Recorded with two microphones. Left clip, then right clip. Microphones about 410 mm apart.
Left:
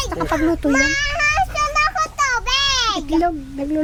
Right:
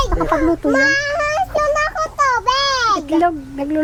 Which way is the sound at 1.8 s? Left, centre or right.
Left.